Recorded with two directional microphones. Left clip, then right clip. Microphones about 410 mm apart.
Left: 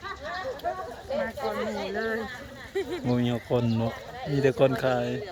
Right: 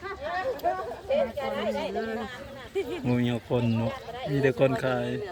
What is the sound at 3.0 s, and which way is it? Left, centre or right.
Speech, centre.